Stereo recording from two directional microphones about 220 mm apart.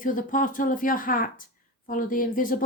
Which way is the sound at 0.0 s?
40° left (ahead or behind).